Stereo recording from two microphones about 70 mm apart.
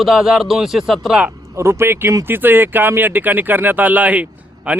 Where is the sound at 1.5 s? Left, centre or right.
Right.